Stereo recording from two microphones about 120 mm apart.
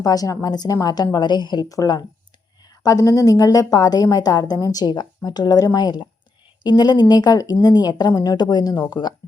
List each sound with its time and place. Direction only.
0.0 s speech: 30° left (ahead or behind)